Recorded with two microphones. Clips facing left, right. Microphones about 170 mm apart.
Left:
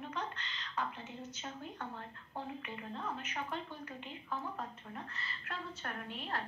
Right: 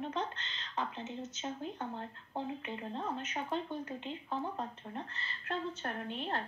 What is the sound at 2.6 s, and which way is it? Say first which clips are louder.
Speech: right 4 dB; 30° right (ahead or behind).